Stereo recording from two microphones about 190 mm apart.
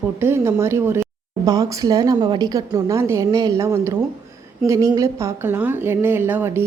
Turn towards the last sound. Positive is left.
turn(degrees=-15)  # may be behind; listen again after turning